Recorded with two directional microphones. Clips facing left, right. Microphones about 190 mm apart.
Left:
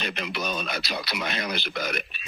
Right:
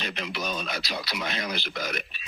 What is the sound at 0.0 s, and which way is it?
Speech, 65° left (ahead or behind).